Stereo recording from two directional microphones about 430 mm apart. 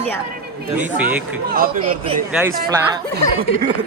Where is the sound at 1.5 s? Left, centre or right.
Centre.